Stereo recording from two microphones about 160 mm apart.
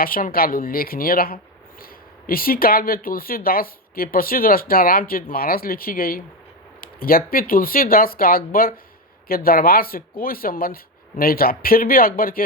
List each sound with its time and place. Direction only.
0.0 s speech: 65° left (ahead or behind)